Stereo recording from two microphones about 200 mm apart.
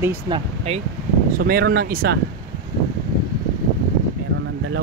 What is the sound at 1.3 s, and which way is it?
Speech, 50° right (ahead or behind).